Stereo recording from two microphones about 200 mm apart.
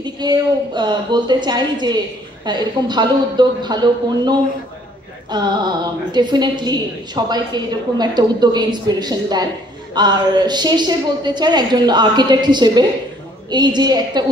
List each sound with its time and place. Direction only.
0.0 s a woman's voice: 20° right (ahead or behind)